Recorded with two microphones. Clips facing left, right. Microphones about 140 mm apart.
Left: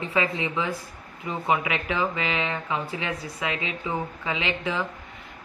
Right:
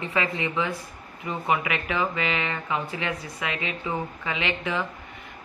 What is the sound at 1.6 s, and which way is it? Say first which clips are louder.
Speech: even; 20° left (ahead or behind).